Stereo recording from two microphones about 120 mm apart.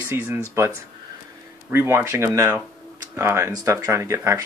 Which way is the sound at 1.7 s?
20° right (ahead or behind).